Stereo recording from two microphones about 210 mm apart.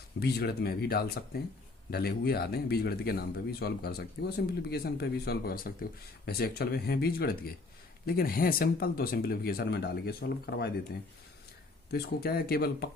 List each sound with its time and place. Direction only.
0.2 s speech: 50° left (ahead or behind)
11.9 s speech: 50° left (ahead or behind)